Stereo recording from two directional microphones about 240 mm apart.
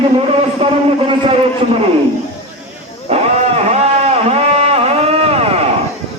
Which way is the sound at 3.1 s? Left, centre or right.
Right.